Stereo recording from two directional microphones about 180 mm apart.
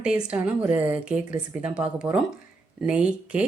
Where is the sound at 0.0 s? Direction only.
5° right (ahead or behind).